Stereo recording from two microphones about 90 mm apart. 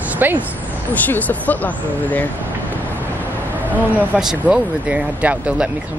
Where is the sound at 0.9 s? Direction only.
20° left (ahead or behind).